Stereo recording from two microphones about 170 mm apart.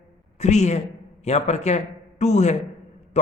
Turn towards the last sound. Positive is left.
turn(degrees=40)  # may be behind; listen again after turning